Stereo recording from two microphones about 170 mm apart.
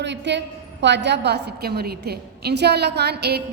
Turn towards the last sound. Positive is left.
turn(degrees=-75)  # may be behind; listen again after turning